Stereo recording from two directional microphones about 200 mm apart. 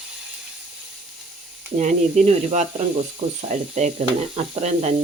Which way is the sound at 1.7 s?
35° right (ahead or behind).